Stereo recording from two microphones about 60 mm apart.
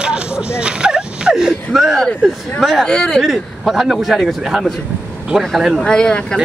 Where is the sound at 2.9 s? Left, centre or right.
Centre.